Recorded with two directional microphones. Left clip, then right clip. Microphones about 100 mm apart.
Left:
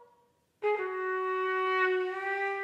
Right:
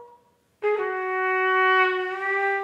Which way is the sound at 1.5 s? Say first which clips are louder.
Right 12 dB; 40° left (ahead or behind).